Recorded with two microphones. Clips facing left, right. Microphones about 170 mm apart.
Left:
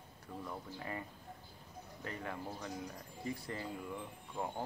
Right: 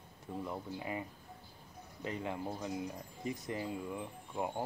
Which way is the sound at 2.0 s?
20° right (ahead or behind).